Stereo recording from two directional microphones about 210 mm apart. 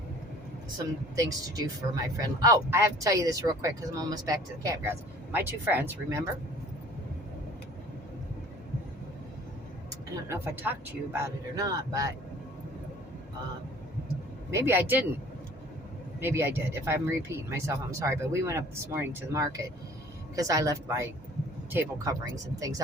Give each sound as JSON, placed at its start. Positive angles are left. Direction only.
{"t": 1.1, "sound": "speech", "side_deg": -15}
{"t": 9.9, "sound": "speech", "side_deg": -15}
{"t": 14.5, "sound": "speech", "side_deg": -10}
{"t": 16.2, "sound": "speech", "side_deg": -10}